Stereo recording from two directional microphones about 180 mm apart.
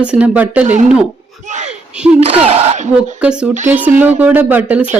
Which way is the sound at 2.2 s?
35° right (ahead or behind).